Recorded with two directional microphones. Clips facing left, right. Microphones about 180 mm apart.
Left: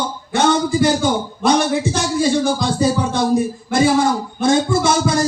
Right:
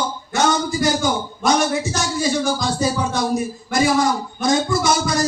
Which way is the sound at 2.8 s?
30° left (ahead or behind).